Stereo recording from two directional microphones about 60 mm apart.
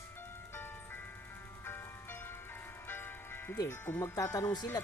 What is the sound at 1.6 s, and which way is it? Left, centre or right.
Music, left.